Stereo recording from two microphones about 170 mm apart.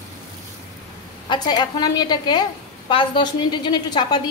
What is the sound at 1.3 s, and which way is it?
A woman's voice, 25° left (ahead or behind).